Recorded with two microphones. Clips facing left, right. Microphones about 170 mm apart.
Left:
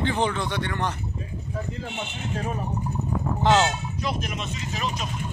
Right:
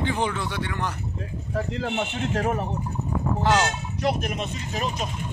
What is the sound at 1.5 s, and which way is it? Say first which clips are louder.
A man's voice: right 6 dB; 70° right (ahead or behind).